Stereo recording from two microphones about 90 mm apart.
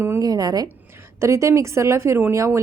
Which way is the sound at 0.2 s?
45° right (ahead or behind).